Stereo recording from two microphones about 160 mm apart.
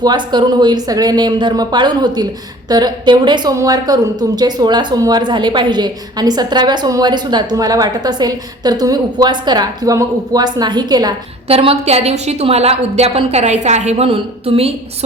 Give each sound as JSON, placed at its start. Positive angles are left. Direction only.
{"t": 0.0, "sound": "a woman's voice", "side_deg": -25}
{"t": 11.4, "sound": "a woman's voice", "side_deg": -40}